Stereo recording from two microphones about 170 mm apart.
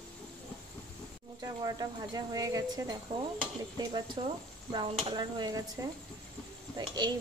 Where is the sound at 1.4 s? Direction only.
20° right (ahead or behind).